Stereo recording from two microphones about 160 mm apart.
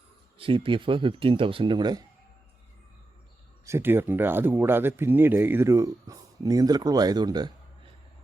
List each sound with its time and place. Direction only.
0.3 s speech: 35° right (ahead or behind)
3.7 s speech: 15° right (ahead or behind)